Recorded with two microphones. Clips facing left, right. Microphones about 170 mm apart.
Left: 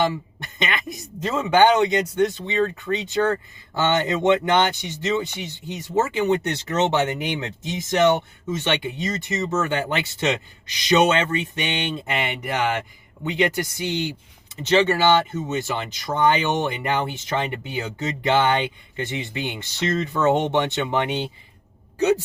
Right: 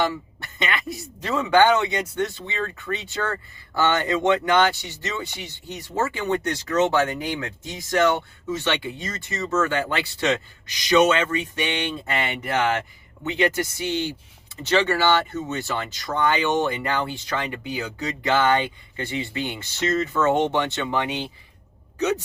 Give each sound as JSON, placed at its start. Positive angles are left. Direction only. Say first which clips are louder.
{"t": 0.0, "sound": "speech", "louder": "left 2 dB", "side_deg": 20}